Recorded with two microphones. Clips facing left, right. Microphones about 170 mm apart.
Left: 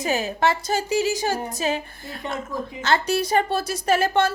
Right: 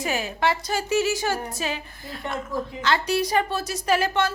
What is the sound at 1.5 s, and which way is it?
Speech, 40° left (ahead or behind).